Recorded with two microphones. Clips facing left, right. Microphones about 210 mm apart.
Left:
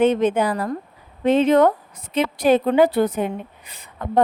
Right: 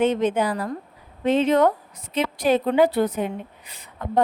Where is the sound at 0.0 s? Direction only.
55° left (ahead or behind).